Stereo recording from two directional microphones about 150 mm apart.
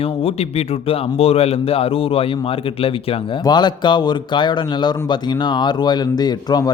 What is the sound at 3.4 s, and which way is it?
Speech, 30° left (ahead or behind).